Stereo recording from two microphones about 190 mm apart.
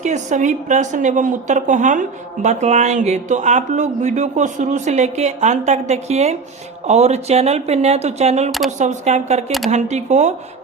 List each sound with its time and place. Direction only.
0.0 s a woman's voice: 40° right (ahead or behind)